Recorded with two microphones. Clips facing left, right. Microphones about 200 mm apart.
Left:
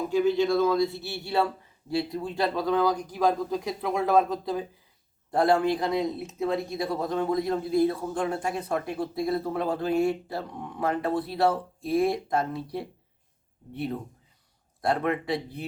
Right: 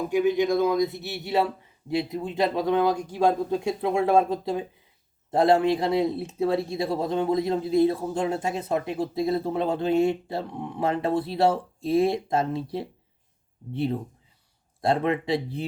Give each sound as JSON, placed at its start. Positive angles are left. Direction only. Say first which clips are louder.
{"t": 0.1, "sound": "speech", "louder": "right 1 dB", "side_deg": -15}